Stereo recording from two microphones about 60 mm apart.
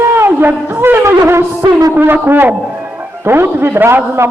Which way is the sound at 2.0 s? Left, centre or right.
Right.